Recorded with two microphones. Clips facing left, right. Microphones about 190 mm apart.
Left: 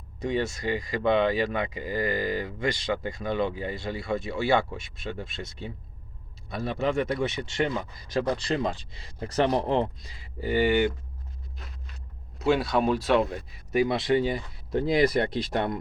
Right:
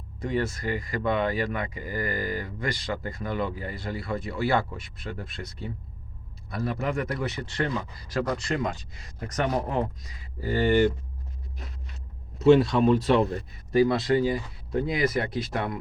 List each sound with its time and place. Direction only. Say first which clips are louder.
0.2 s speech: even; 20° left (ahead or behind)
8.4 s speech: left 1 dB; 30° left (ahead or behind)
10.5 s speech: right 1 dB; 10° left (ahead or behind)
12.5 s speech: right 5 dB; 5° left (ahead or behind)
13.7 s speech: right 2 dB; 20° left (ahead or behind)